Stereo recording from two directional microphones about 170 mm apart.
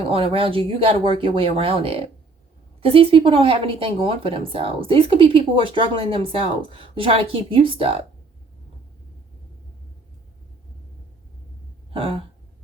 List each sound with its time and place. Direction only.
0.0 s a woman's voice: 35° right (ahead or behind)
11.9 s a woman's voice: 30° right (ahead or behind)